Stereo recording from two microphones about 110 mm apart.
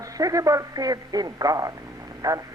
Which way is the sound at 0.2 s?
30° right (ahead or behind).